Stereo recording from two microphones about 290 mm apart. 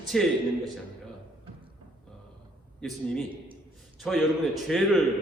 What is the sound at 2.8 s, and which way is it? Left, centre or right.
A man's voice, centre.